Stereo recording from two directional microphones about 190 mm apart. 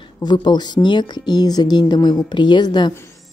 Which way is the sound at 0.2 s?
20° left (ahead or behind).